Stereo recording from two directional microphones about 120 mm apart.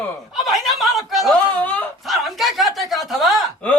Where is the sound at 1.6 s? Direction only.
15° left (ahead or behind).